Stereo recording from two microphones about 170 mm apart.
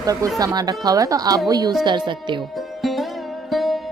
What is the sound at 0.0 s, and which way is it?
A woman's voice, 20° right (ahead or behind).